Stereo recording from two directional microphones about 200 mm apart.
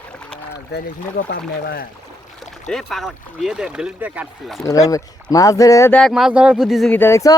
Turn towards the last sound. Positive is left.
turn(degrees=15)  # may be behind; listen again after turning